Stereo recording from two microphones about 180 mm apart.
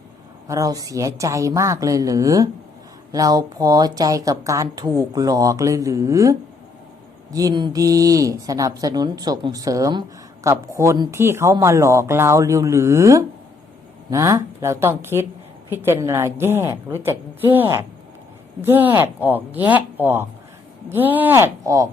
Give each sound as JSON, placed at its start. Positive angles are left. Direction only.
{"t": 0.4, "sound": "speech", "side_deg": -20}
{"t": 7.3, "sound": "a woman's voice", "side_deg": -20}